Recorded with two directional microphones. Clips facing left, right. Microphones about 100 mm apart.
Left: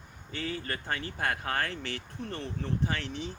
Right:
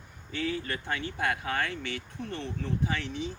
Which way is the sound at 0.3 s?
40° left (ahead or behind).